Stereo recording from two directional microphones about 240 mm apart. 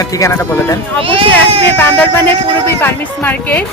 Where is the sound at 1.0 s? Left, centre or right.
Right.